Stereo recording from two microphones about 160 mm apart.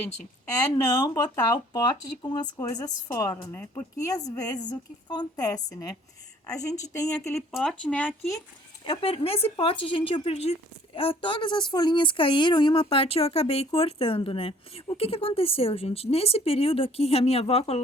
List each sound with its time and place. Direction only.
1.0 s speech: 25° left (ahead or behind)
7.5 s speech: centre (ahead or behind)
8.8 s speech: 35° left (ahead or behind)